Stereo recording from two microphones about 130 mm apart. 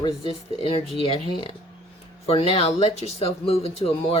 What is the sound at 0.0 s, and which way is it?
Speech, 40° left (ahead or behind).